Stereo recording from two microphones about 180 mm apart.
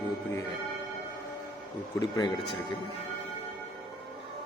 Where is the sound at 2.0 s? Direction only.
20° left (ahead or behind).